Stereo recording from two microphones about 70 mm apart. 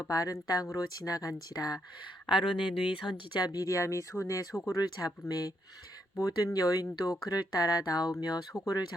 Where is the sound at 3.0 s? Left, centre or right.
Left.